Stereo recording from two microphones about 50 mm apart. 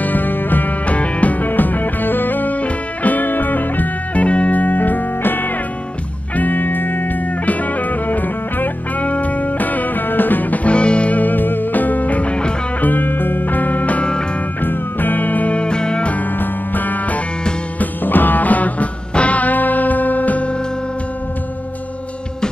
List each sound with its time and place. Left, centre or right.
0.0 s music: left
12.8 s music: left; by 16.1 s centre
16.1 s music: left